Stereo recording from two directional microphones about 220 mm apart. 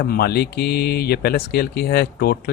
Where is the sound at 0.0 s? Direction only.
45° left (ahead or behind).